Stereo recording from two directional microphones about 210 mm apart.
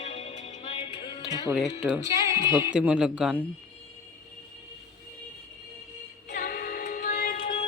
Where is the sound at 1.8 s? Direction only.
5° right (ahead or behind).